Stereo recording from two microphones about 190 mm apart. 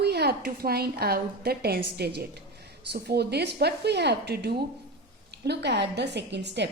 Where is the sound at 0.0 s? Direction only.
60° right (ahead or behind).